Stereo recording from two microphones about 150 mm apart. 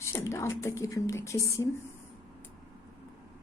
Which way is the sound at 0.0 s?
20° left (ahead or behind).